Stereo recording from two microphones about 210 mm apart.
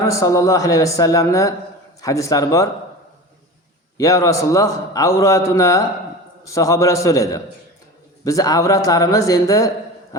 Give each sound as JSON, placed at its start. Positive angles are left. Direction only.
{"t": 0.0, "sound": "a man's voice", "side_deg": 15}
{"t": 3.9, "sound": "a man's voice", "side_deg": 15}